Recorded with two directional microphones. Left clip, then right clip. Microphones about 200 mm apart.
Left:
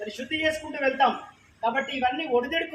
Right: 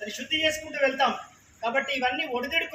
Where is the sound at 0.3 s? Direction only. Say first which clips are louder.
Right 1 dB; 45° right (ahead or behind).